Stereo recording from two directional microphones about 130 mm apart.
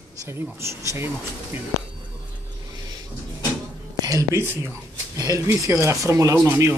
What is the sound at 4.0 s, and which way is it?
Speech, 25° right (ahead or behind).